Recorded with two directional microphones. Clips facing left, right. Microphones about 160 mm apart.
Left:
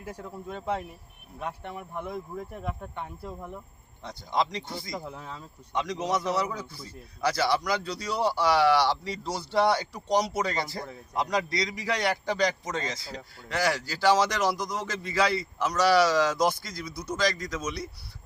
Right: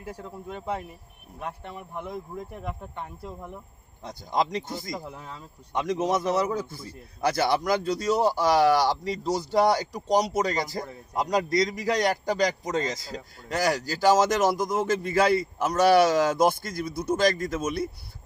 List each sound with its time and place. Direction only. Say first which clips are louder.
0.0 s speech: right 1 dB; 10° right (ahead or behind)
4.3 s speech: right 2 dB; 45° right (ahead or behind)
4.9 s speech: even; 10° right (ahead or behind)
5.7 s speech: right 3 dB; 50° right (ahead or behind)